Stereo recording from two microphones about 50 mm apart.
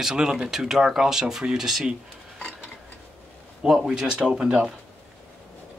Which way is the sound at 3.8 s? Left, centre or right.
Centre.